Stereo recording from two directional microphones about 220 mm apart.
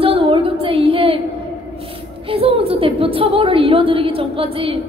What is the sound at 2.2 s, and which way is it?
A woman's voice, 25° right (ahead or behind).